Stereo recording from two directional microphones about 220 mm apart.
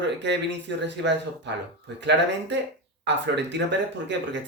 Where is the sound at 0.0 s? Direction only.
50° right (ahead or behind).